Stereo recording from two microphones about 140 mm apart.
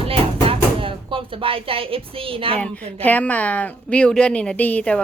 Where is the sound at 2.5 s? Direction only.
10° left (ahead or behind).